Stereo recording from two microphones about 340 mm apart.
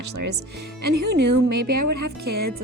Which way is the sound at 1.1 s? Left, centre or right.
Right.